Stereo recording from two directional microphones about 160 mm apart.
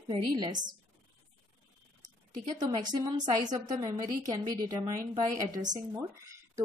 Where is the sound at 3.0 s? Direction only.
25° right (ahead or behind).